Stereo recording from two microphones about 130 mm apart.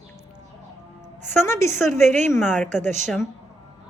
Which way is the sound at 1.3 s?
20° left (ahead or behind).